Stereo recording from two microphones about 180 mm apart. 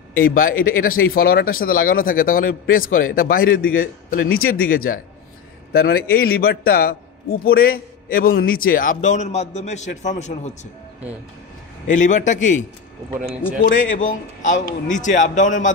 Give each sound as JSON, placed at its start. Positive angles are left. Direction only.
{"t": 0.3, "sound": "a man's voice", "side_deg": 50}
{"t": 11.9, "sound": "speech", "side_deg": 45}
{"t": 13.7, "sound": "speech", "side_deg": 45}